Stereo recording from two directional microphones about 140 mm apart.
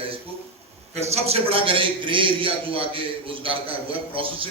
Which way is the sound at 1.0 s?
50° right (ahead or behind).